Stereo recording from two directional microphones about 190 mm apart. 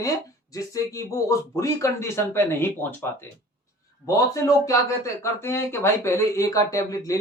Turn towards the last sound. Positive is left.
turn(degrees=15)  # may be behind; listen again after turning